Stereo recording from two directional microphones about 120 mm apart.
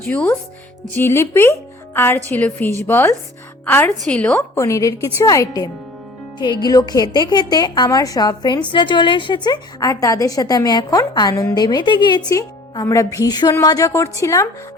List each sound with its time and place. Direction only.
0.0 s a woman's voice: 10° left (ahead or behind)
4.4 s a woman's voice: 25° left (ahead or behind)